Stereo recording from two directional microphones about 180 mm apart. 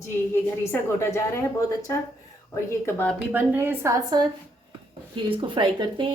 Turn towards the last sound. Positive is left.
turn(degrees=-25)  # may be behind; listen again after turning